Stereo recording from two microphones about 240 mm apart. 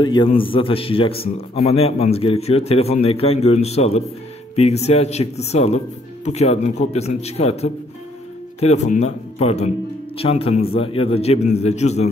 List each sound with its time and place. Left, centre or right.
0.0 s a man's voice: centre